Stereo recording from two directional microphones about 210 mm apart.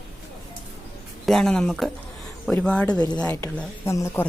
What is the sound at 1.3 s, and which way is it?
A woman's voice, centre (ahead or behind).